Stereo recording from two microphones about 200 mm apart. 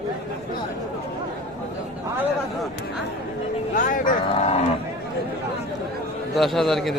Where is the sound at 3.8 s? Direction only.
40° left (ahead or behind).